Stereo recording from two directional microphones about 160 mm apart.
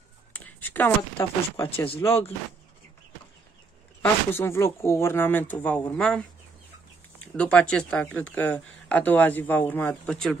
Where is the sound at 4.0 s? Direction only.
15° left (ahead or behind).